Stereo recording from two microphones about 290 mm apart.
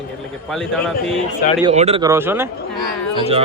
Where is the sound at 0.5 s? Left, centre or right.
Centre.